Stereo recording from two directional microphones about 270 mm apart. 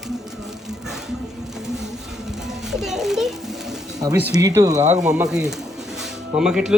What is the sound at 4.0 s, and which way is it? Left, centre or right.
Speech, centre.